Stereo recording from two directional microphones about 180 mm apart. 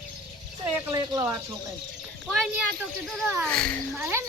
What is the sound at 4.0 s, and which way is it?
Speech, 15° right (ahead or behind).